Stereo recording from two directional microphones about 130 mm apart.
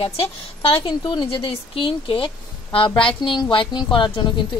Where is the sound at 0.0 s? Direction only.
45° left (ahead or behind).